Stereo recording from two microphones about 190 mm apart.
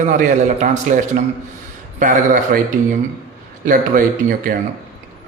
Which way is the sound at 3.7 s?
45° right (ahead or behind).